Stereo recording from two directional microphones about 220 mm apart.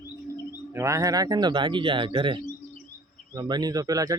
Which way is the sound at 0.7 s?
15° right (ahead or behind).